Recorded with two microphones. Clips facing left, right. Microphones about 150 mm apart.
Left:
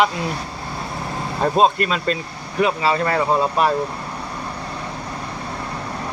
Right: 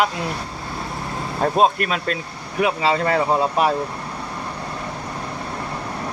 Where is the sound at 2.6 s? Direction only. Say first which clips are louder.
Even; 20° right (ahead or behind).